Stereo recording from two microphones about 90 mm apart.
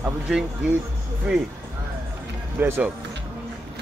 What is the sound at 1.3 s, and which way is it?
Speech, 5° right (ahead or behind).